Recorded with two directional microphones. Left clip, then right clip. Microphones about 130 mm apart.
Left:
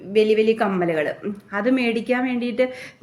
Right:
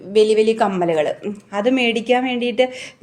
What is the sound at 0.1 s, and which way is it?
Speech, 45° right (ahead or behind).